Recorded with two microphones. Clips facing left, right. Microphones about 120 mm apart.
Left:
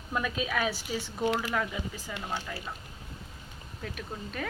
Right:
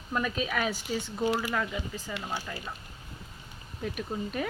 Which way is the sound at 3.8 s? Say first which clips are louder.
Right 6 dB; 10° right (ahead or behind).